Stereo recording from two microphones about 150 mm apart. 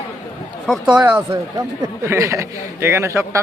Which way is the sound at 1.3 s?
20° right (ahead or behind).